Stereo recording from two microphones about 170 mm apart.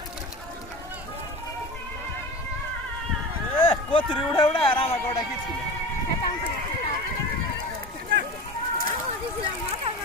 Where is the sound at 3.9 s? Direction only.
30° left (ahead or behind).